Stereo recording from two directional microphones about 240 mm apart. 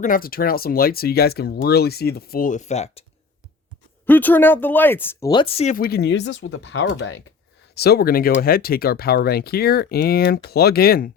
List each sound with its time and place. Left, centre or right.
0.0 s speech: left
4.0 s speech: centre; by 11.1 s left